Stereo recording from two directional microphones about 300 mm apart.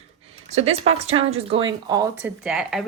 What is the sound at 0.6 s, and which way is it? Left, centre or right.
A woman's voice, right.